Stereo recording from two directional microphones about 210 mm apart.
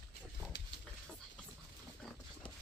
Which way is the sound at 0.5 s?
60° left (ahead or behind).